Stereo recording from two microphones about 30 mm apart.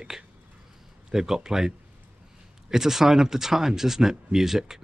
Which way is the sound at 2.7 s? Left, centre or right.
Centre.